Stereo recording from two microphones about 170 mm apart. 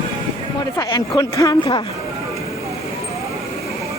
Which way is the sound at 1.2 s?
20° left (ahead or behind).